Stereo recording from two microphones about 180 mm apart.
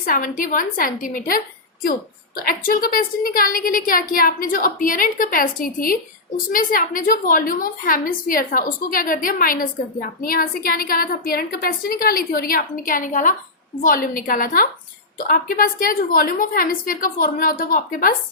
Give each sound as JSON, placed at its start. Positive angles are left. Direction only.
{"t": 0.0, "sound": "a woman's voice", "side_deg": 50}